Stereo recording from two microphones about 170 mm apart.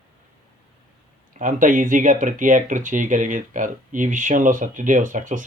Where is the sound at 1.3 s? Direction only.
50° right (ahead or behind).